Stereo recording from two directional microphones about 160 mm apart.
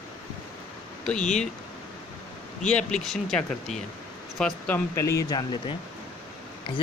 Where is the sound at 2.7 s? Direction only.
5° left (ahead or behind).